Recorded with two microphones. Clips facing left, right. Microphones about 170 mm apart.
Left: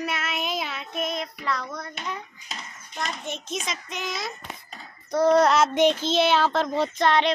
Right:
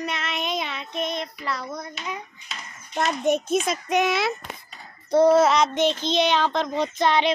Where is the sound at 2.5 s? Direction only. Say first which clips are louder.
Left 1 dB; 40° left (ahead or behind).